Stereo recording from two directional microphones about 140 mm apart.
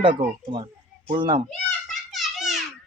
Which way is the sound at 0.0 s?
35° right (ahead or behind).